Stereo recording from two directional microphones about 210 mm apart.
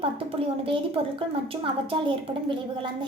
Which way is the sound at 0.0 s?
25° right (ahead or behind).